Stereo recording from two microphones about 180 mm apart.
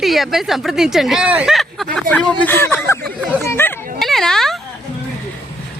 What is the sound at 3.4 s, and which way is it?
Chatter, 15° left (ahead or behind).